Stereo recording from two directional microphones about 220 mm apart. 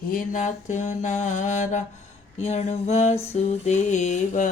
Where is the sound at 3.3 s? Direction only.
30° left (ahead or behind).